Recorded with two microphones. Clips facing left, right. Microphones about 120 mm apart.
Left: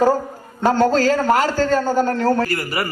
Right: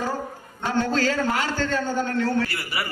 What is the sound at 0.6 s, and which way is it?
A man's voice, 40° left (ahead or behind).